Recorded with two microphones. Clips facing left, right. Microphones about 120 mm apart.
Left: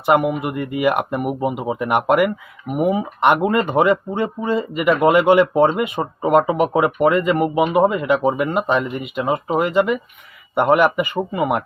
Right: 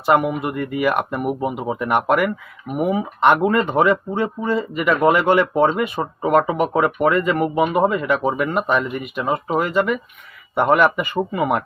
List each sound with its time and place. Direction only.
0.0 s speech: 10° left (ahead or behind)
8.4 s speech: 20° left (ahead or behind); by 11.6 s 5° left (ahead or behind)